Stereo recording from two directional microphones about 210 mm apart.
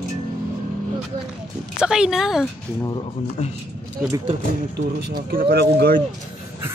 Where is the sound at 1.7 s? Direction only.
5° right (ahead or behind).